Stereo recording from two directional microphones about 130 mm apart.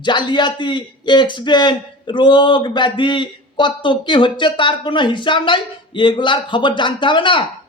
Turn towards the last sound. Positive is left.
turn(degrees=40)  # may be behind; listen again after turning